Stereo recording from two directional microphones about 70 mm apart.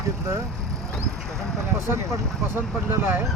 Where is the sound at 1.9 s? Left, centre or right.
Right.